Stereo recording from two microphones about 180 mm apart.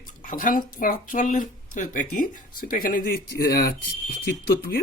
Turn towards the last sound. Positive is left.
turn(degrees=60)  # may be behind; listen again after turning